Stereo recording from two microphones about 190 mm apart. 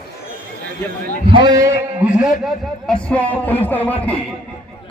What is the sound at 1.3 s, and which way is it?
A man's voice, 20° right (ahead or behind).